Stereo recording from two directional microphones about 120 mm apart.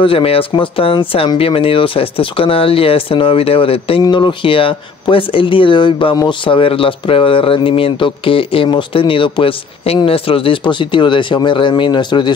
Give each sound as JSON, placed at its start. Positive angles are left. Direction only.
{"t": 0.0, "sound": "speech", "side_deg": 50}
{"t": 4.0, "sound": "speech", "side_deg": 40}